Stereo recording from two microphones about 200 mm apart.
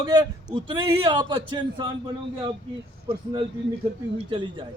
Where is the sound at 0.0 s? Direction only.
20° right (ahead or behind).